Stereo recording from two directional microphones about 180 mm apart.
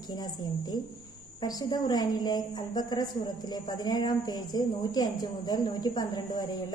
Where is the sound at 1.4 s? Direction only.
20° left (ahead or behind).